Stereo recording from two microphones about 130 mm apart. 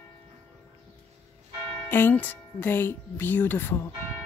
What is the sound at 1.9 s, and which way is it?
Speech, 15° left (ahead or behind).